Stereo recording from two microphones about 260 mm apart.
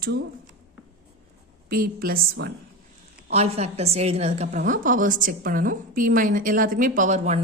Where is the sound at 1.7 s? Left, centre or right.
Right.